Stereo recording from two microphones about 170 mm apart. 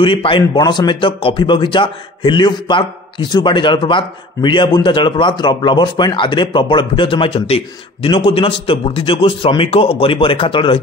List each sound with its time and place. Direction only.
0.0 s speech: 30° left (ahead or behind)